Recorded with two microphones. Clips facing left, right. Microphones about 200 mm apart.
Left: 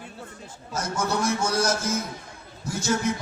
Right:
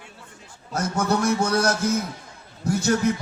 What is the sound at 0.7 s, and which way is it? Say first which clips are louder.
A man's voice: right 4 dB; 60° right (ahead or behind).